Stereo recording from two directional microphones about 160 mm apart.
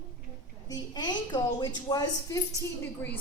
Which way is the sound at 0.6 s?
25° left (ahead or behind).